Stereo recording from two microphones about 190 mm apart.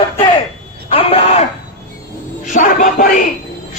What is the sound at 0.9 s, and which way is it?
Speech, 30° left (ahead or behind).